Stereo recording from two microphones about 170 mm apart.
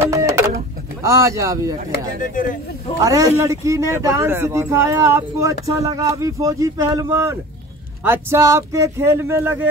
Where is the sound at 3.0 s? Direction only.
20° right (ahead or behind).